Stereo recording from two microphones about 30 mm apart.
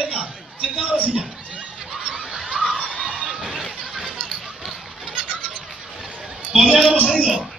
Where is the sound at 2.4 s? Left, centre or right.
Right.